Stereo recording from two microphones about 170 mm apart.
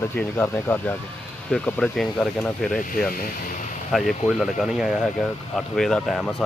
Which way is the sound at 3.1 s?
50° left (ahead or behind).